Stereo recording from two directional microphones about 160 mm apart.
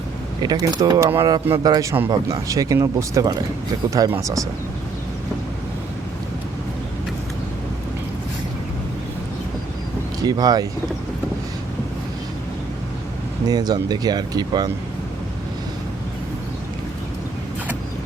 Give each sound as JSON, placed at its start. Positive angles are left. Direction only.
{"t": 0.4, "sound": "speech", "side_deg": -25}
{"t": 10.2, "sound": "speech", "side_deg": -25}
{"t": 13.5, "sound": "speech", "side_deg": -25}